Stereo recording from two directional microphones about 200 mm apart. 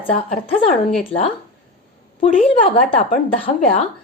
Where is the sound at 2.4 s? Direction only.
30° left (ahead or behind).